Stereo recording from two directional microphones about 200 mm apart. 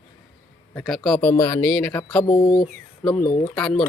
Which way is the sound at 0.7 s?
5° left (ahead or behind).